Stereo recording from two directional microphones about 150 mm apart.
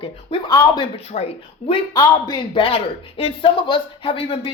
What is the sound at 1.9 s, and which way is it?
Speech, 25° left (ahead or behind).